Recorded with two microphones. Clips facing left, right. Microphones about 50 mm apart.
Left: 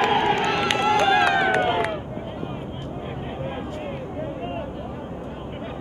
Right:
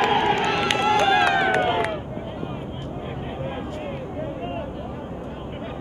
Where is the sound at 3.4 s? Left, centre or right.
Centre.